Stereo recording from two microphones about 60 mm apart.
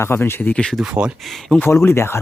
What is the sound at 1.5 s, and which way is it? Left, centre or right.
Speech, left.